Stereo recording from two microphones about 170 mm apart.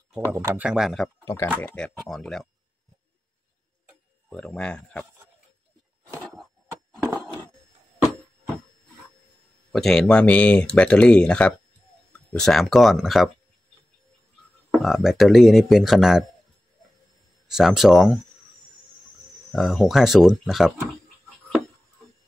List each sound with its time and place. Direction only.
0.3 s speech: 10° right (ahead or behind)
1.2 s speech: 15° left (ahead or behind)
1.6 s speech: 5° left (ahead or behind)
4.3 s speech: 5° left (ahead or behind)
6.1 s a sound: 5° left (ahead or behind)
9.7 s speech: 5° left (ahead or behind)
14.7 s speech: centre (ahead or behind)
17.5 s speech: centre (ahead or behind)
19.5 s speech: centre (ahead or behind)